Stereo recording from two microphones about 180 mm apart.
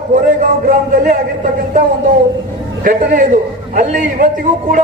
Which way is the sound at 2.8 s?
55° right (ahead or behind).